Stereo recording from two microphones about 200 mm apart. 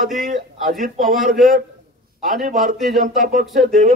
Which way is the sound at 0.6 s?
40° right (ahead or behind).